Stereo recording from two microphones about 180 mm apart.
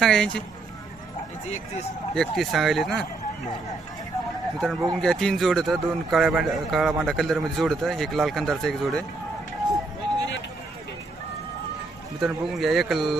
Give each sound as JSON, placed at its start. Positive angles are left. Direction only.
{"t": 0.0, "sound": "speech", "side_deg": 5}
{"t": 1.5, "sound": "speech", "side_deg": 40}
{"t": 2.1, "sound": "speech", "side_deg": 0}
{"t": 4.5, "sound": "speech", "side_deg": 0}
{"t": 12.2, "sound": "speech", "side_deg": 0}